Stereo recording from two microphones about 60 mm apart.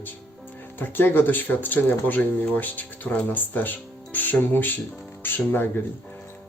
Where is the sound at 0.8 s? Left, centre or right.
Left.